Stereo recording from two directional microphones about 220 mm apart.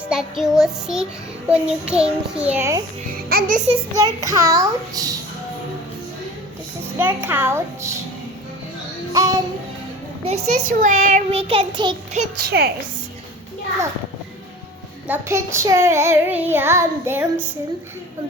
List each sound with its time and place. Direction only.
0.1 s a child's voice: centre (ahead or behind)
3.2 s music: 40° right (ahead or behind)
3.7 s child singing: 15° right (ahead or behind)
7.0 s child singing: 10° right (ahead or behind)
9.1 s music: 15° right (ahead or behind)
10.2 s a child's voice: 30° right (ahead or behind)
12.5 s a woman's voice: 45° right (ahead or behind)
15.0 s child singing: 10° right (ahead or behind)